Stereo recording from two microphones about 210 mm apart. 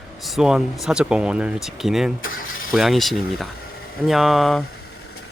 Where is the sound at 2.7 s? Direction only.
Centre (ahead or behind).